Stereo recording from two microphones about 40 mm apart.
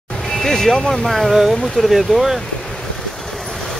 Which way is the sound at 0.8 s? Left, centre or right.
Centre.